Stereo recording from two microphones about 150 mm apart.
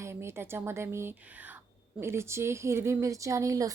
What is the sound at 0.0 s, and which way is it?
A woman's voice, 15° right (ahead or behind).